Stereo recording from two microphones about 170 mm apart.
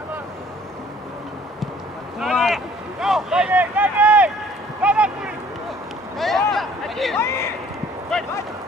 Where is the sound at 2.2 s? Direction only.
Centre (ahead or behind).